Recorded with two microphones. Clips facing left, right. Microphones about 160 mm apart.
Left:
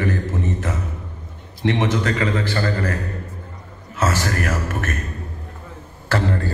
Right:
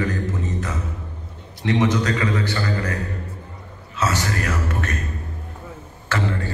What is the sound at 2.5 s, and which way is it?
Speech, 50° left (ahead or behind).